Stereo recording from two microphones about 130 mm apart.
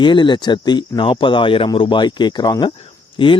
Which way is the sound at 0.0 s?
35° left (ahead or behind).